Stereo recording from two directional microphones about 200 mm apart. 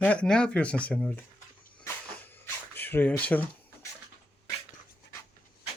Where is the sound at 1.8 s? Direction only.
10° left (ahead or behind).